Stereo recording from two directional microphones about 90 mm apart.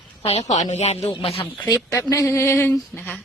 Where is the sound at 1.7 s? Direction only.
35° left (ahead or behind).